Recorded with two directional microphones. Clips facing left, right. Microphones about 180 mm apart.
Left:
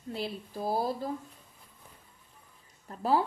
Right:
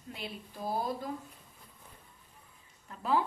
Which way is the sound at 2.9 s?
35° left (ahead or behind).